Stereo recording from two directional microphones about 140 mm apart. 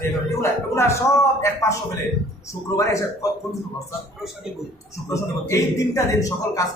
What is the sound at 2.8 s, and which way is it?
Speech, 20° left (ahead or behind).